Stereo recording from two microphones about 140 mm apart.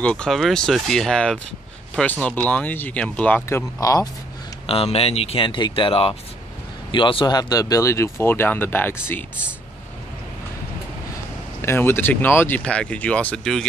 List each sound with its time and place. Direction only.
0.0 s speech: 5° left (ahead or behind); by 4.1 s 25° left (ahead or behind)
4.6 s speech: 45° left (ahead or behind); by 8.9 s 15° left (ahead or behind)
11.6 s speech: 15° left (ahead or behind)